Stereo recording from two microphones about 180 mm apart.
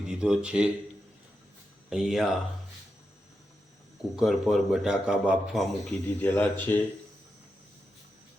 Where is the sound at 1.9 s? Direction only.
Centre (ahead or behind).